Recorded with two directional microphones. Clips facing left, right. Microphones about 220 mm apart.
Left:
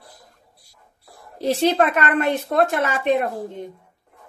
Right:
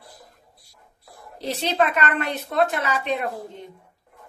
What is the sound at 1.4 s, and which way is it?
A woman's voice, 50° left (ahead or behind).